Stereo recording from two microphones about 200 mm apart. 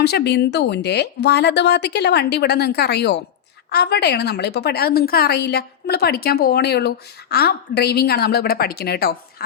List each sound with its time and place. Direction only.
0.0 s a woman's voice: 55° left (ahead or behind)